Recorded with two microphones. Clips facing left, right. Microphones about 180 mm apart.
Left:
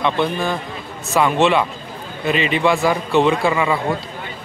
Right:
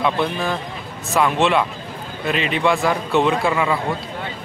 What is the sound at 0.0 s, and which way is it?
Speech, centre (ahead or behind).